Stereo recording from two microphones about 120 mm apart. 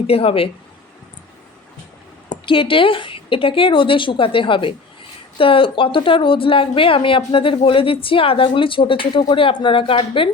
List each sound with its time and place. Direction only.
0.1 s a woman's voice: 55° left (ahead or behind)
2.3 s a woman's voice: 45° left (ahead or behind)